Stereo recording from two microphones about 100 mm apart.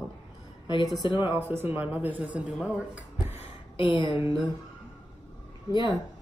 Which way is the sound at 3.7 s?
55° left (ahead or behind).